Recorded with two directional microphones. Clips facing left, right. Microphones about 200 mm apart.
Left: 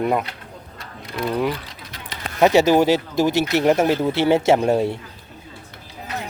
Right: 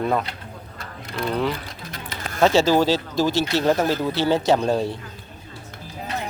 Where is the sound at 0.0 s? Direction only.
15° left (ahead or behind).